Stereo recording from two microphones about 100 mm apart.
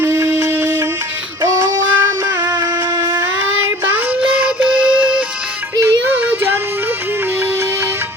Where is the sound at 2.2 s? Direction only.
20° right (ahead or behind).